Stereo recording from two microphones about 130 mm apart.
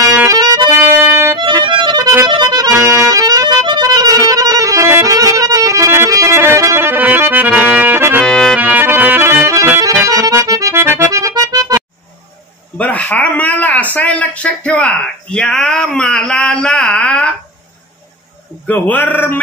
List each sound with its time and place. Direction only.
0.3 s music: 30° right (ahead or behind)
1.4 s music: 40° right (ahead or behind)
2.2 s accordion: 35° right (ahead or behind)
2.9 s music: 25° right (ahead or behind)
8.2 s music: 5° left (ahead or behind)
8.5 s music: 10° right (ahead or behind)
12.7 s speech: 10° left (ahead or behind)
18.7 s speech: 10° left (ahead or behind)